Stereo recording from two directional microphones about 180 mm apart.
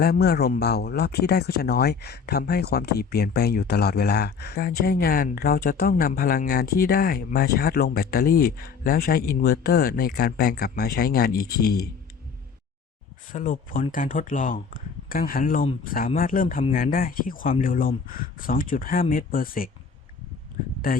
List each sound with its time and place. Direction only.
0.0 s speech: 60° left (ahead or behind)
13.3 s speech: 45° left (ahead or behind)
20.8 s speech: 50° left (ahead or behind)